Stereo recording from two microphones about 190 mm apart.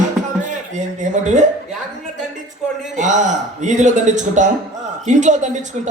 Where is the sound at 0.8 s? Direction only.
40° right (ahead or behind).